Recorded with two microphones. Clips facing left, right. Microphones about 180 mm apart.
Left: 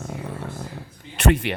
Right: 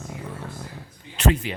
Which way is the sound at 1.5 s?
70° left (ahead or behind).